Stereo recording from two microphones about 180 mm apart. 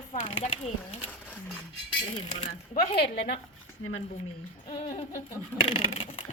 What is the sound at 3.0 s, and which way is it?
Speech, 65° left (ahead or behind).